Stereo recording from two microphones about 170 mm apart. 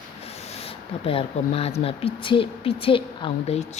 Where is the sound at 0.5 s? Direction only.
35° left (ahead or behind).